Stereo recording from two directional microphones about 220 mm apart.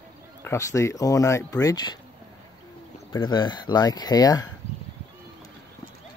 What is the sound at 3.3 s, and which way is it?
Speech, 20° left (ahead or behind).